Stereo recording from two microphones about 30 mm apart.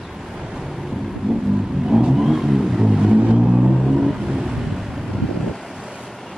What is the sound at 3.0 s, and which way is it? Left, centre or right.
Vehicle, right.